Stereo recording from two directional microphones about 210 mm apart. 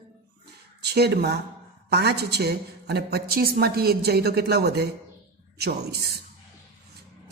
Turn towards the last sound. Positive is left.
turn(degrees=-50)  # may be behind; listen again after turning